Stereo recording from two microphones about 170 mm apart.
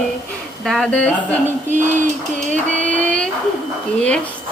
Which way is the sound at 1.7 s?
50° right (ahead or behind).